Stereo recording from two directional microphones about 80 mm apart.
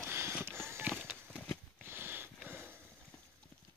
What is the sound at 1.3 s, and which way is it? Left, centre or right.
Horse, centre.